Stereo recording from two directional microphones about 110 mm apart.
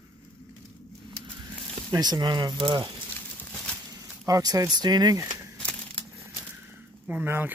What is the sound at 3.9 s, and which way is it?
Speech, 35° right (ahead or behind).